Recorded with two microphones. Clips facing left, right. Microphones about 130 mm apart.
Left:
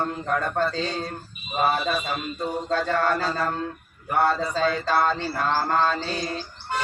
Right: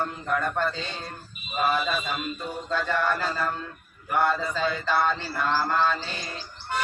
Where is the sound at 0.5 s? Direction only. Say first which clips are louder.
Left 4 dB; 35° left (ahead or behind).